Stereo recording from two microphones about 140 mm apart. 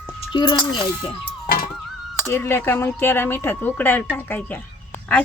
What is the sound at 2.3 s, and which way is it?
Speech, 15° left (ahead or behind).